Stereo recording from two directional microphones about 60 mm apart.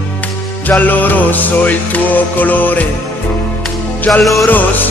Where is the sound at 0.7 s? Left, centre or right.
Left.